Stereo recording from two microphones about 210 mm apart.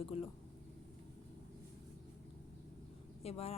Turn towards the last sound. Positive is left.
turn(degrees=30)  # may be behind; listen again after turning